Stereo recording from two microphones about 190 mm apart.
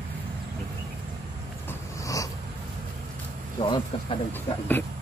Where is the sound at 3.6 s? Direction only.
25° left (ahead or behind).